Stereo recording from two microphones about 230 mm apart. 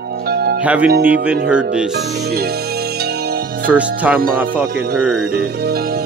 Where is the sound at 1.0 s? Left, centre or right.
Centre.